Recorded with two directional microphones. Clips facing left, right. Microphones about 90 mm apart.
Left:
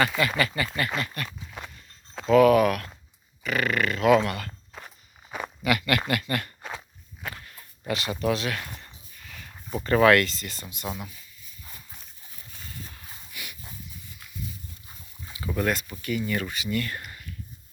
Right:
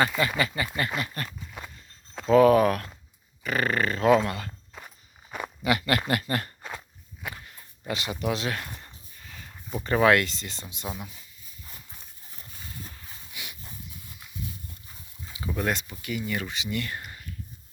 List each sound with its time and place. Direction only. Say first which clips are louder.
0.2 s speech: left 1 dB; 20° right (ahead or behind)
1.0 s speech: left 1 dB; 30° right (ahead or behind)
1.4 s horse: left 1 dB; centre (ahead or behind)
2.3 s speech: even; 30° right (ahead or behind)
5.6 s speech: even; 30° right (ahead or behind)
6.6 s walk: left 1 dB; centre (ahead or behind)
7.3 s a sound: left 1 dB; 15° right (ahead or behind)
8.5 s a sound: even; 5° right (ahead or behind)
9.1 s dog: left 1 dB; 25° right (ahead or behind)
9.8 s speech: left 2 dB; 15° right (ahead or behind)
10.8 s speech: left 2 dB; 10° right (ahead or behind)
13.3 s dog: left 1 dB; 20° right (ahead or behind)
15.5 s speech: left 2 dB; 20° right (ahead or behind)